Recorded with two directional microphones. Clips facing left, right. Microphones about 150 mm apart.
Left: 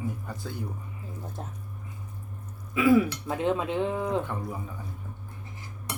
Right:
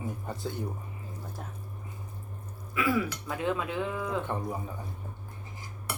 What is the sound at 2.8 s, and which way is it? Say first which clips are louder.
Speech: left 7 dB; 20° left (ahead or behind).